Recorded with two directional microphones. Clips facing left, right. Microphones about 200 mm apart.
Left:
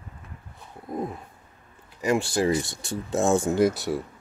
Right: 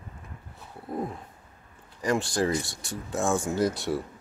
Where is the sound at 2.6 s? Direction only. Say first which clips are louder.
Left 5 dB; 25° left (ahead or behind).